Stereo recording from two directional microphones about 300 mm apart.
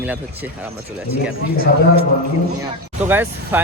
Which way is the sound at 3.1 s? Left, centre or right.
Centre.